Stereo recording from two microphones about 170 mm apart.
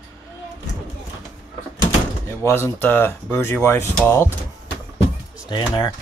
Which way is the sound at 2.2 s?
15° left (ahead or behind).